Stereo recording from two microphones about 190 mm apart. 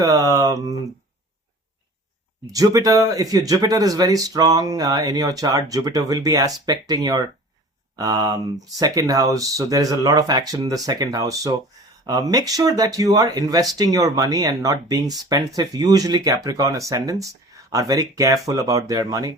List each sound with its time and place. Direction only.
0.0 s speech: 15° right (ahead or behind)
2.5 s speech: 20° right (ahead or behind)